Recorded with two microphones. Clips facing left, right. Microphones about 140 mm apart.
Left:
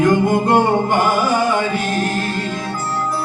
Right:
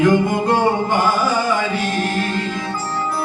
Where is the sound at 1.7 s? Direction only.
45° left (ahead or behind).